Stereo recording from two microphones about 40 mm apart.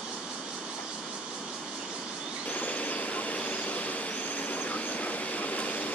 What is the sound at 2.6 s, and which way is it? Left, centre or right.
Train, left.